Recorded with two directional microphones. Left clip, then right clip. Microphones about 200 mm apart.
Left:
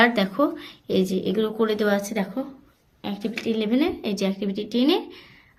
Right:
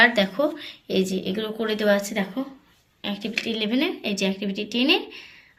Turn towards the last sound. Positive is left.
turn(degrees=45)  # may be behind; listen again after turning